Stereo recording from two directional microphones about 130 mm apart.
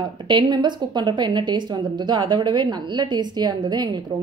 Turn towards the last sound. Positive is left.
turn(degrees=-35)  # may be behind; listen again after turning